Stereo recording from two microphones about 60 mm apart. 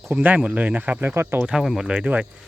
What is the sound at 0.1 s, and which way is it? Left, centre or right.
Speech, right.